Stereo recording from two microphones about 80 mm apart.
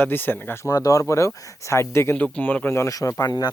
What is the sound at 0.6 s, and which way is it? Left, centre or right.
Speech, left.